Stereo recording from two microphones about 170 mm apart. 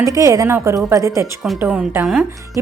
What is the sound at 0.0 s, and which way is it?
A woman's voice, 20° right (ahead or behind).